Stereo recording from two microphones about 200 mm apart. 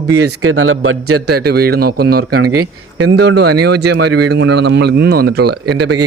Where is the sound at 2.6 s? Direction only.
90° right.